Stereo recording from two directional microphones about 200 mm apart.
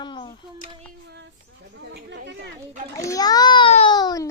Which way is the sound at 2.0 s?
60° right (ahead or behind).